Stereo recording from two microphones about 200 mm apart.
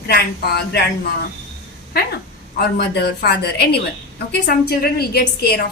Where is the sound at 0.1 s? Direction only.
50° left (ahead or behind).